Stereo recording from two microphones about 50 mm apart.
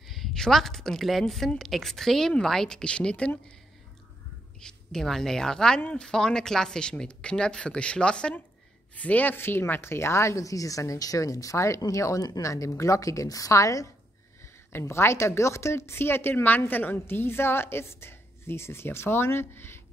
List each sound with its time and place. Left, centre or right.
0.0 s a woman's voice: centre; by 3.5 s left
4.6 s a woman's voice: centre
8.9 s speech: left
14.4 s a woman's voice: left
16.4 s a woman's voice: left